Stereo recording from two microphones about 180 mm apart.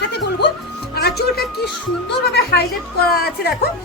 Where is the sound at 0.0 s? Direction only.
70° left (ahead or behind).